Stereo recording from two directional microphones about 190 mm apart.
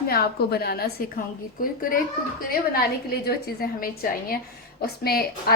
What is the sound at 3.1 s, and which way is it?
A woman's voice, 55° left (ahead or behind).